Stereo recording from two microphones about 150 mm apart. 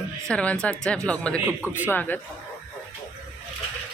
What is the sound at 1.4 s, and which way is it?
Speech, 10° right (ahead or behind).